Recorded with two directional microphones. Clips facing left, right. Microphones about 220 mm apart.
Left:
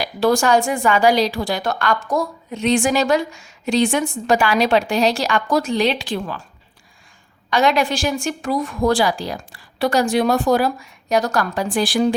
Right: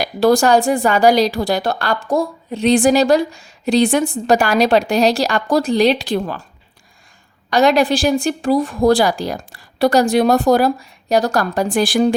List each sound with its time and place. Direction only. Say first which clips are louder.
0.0 s a woman's voice: right 4 dB; 35° right (ahead or behind)
7.5 s a woman's voice: right 4 dB; 40° right (ahead or behind)